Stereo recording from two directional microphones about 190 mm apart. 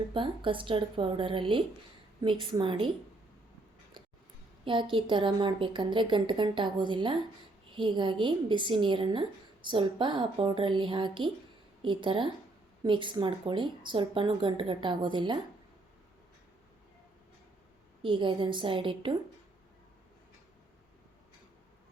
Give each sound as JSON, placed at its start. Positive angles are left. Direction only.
{"t": 0.1, "sound": "a woman's voice", "side_deg": -25}
{"t": 4.6, "sound": "a woman's voice", "side_deg": -25}
{"t": 18.0, "sound": "a woman's voice", "side_deg": -25}